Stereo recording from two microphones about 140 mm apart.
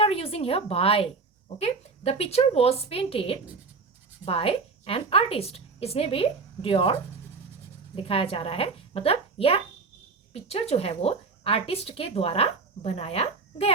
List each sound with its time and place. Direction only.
0.0 s a woman's voice: 45° left (ahead or behind)
7.9 s a woman's voice: 40° left (ahead or behind)